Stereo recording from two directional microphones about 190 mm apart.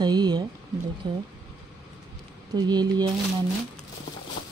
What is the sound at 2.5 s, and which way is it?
Speech, 20° right (ahead or behind).